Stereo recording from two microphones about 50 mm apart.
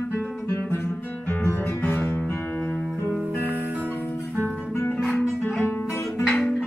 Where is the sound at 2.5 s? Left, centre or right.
Left.